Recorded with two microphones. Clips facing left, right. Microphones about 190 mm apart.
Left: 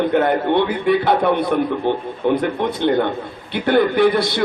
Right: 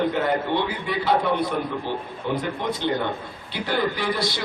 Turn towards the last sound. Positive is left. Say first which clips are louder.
# left 10 dB
turn(degrees=60)  # may be behind; listen again after turning